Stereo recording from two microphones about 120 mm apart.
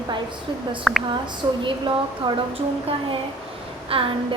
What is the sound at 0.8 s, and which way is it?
Speech, centre (ahead or behind).